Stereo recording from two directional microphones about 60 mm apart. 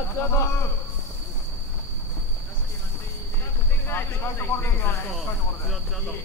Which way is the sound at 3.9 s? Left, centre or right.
Left.